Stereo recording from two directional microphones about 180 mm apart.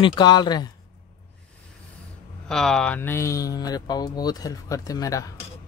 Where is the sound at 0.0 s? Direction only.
25° left (ahead or behind).